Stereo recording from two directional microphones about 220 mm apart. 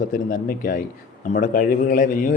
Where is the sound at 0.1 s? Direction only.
40° left (ahead or behind).